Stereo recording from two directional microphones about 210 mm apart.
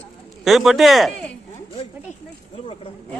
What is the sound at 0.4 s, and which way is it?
Speech, centre (ahead or behind).